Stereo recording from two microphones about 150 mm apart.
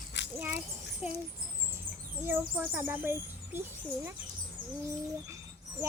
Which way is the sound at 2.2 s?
15° right (ahead or behind).